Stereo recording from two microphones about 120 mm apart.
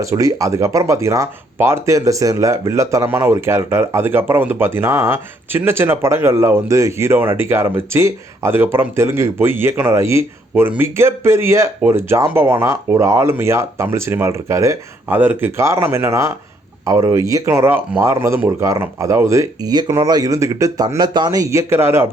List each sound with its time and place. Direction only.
0.0 s speech: 25° right (ahead or behind)